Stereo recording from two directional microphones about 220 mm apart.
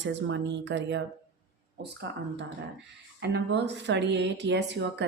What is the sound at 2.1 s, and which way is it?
Speech, 55° right (ahead or behind).